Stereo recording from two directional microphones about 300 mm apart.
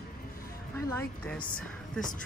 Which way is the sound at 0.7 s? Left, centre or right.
Centre.